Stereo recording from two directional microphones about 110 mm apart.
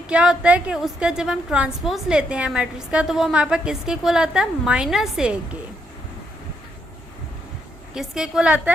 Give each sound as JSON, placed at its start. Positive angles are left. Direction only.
{"t": 0.1, "sound": "a woman's voice", "side_deg": -10}
{"t": 7.9, "sound": "a woman's voice", "side_deg": -5}